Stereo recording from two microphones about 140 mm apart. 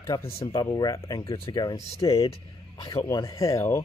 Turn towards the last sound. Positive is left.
turn(degrees=20)  # may be behind; listen again after turning